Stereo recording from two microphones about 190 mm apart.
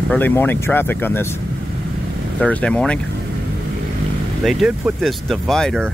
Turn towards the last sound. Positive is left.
turn(degrees=0)  # may be behind; listen again after turning